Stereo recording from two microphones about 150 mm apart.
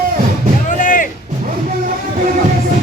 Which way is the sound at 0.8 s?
60° left (ahead or behind).